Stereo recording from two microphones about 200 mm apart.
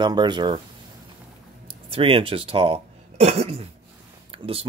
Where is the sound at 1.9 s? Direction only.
25° right (ahead or behind).